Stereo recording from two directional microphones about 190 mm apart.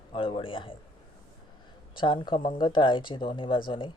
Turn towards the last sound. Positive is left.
turn(degrees=25)  # may be behind; listen again after turning